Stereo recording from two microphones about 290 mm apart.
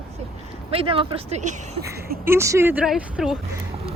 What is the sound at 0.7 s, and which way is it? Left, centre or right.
Speech, centre.